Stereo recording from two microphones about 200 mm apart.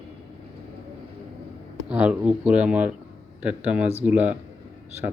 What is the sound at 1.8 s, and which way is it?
Speech, 5° right (ahead or behind).